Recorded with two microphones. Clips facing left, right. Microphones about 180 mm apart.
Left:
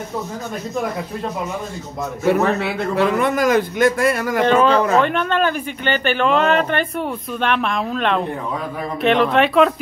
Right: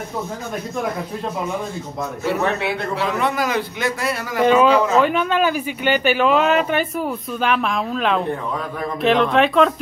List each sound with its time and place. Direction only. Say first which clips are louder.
3.0 s a man's voice: left 6 dB; 50° left (ahead or behind)
4.4 s speech: right 2 dB; 5° right (ahead or behind)